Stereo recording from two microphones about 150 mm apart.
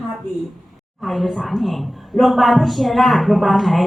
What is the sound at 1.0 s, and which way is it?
A woman's voice, centre (ahead or behind).